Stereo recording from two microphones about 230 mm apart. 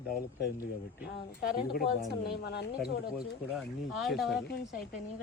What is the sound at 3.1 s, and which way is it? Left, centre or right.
Speech, centre.